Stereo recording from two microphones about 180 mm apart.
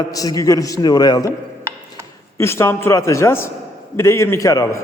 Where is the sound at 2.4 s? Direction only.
15° left (ahead or behind).